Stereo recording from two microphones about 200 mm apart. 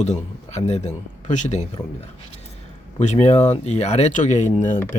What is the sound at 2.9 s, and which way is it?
Speech, 35° left (ahead or behind).